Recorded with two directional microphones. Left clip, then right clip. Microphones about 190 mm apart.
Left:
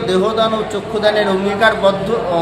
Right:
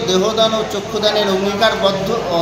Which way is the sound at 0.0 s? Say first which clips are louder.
Even; 5° left (ahead or behind).